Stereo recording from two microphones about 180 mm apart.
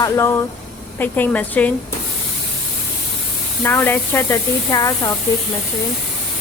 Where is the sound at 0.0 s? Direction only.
15° left (ahead or behind).